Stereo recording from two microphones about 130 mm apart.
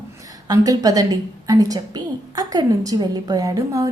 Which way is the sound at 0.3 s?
30° right (ahead or behind).